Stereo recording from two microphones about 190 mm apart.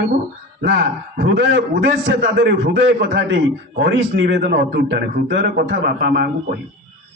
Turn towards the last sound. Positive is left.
turn(degrees=-55)  # may be behind; listen again after turning